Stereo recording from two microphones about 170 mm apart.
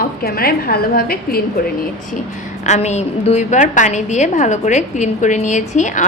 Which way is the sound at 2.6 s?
45° left (ahead or behind).